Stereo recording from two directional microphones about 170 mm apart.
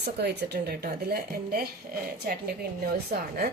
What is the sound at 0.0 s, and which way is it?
A woman's voice, 75° right (ahead or behind).